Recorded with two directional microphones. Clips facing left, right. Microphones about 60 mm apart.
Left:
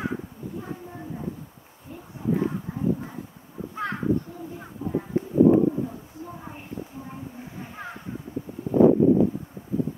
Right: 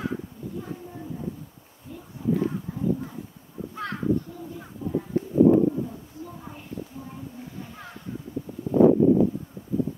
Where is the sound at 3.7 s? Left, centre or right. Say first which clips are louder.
Left 1 dB; centre.